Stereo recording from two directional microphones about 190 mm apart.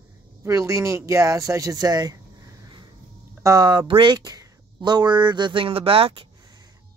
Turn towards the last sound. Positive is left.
turn(degrees=-30)  # may be behind; listen again after turning